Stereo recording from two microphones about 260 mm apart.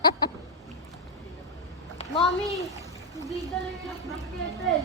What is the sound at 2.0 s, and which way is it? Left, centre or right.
Speech, left.